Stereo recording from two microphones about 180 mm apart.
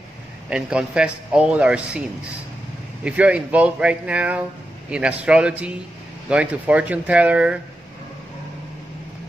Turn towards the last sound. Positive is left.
turn(degrees=-5)  # may be behind; listen again after turning